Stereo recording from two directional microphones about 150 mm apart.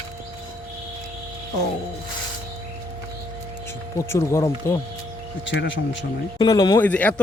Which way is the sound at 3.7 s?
20° left (ahead or behind).